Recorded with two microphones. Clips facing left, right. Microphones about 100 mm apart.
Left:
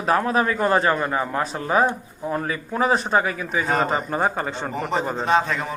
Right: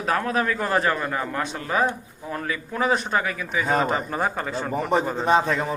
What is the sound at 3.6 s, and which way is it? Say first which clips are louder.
Speech: even; centre (ahead or behind).